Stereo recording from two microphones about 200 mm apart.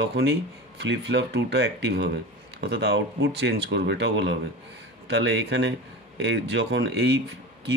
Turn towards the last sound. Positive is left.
turn(degrees=-60)  # may be behind; listen again after turning